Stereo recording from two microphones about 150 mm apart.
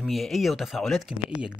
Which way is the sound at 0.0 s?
Centre (ahead or behind).